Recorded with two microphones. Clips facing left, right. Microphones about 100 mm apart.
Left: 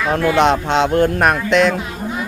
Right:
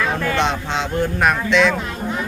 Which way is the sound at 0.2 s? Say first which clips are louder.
Left 5 dB; 10° left (ahead or behind).